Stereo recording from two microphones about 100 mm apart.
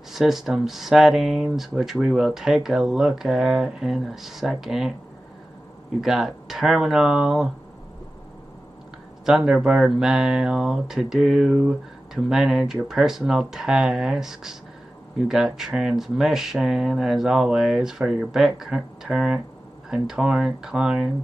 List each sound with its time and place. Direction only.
0.1 s speech: centre (ahead or behind)
5.9 s speech: 5° right (ahead or behind)
9.2 s speech: 5° right (ahead or behind)